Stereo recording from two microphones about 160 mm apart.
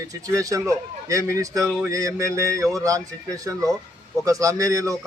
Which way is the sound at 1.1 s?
20° right (ahead or behind).